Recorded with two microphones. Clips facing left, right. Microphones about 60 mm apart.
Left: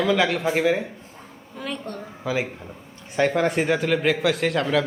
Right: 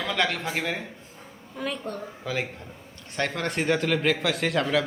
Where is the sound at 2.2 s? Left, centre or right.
Centre.